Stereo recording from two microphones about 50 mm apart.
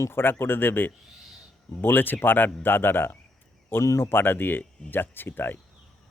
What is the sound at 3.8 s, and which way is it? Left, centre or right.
Speech, left.